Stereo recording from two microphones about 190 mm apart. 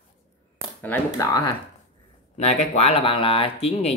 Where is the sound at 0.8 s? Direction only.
15° left (ahead or behind).